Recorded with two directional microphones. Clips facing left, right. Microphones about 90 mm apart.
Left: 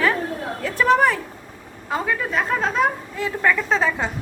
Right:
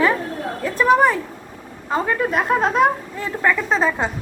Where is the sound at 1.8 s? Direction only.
25° right (ahead or behind).